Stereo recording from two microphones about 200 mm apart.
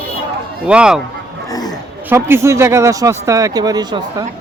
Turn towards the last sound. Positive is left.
turn(degrees=-20)  # may be behind; listen again after turning